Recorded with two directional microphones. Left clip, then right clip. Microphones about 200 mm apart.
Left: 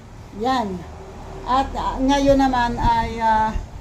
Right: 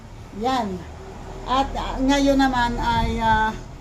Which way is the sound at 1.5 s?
20° left (ahead or behind).